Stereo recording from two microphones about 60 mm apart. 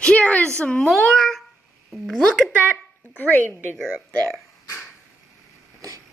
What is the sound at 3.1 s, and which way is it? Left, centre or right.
Speech, left.